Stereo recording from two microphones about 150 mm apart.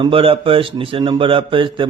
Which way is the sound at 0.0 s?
35° right (ahead or behind).